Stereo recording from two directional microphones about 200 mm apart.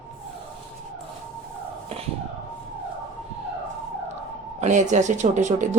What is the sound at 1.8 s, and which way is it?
Speech, 30° right (ahead or behind).